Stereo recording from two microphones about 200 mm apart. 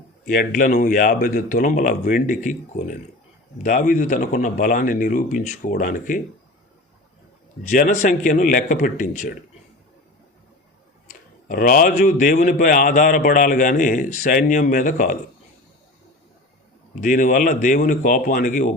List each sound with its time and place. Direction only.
0.3 s a man's voice: 45° left (ahead or behind)
7.6 s speech: 40° left (ahead or behind)
11.1 s a man's voice: 45° left (ahead or behind)
16.9 s speech: 40° left (ahead or behind)